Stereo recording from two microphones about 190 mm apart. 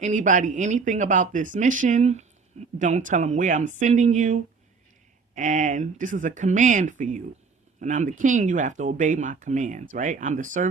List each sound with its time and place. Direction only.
0.0 s speech: 40° right (ahead or behind)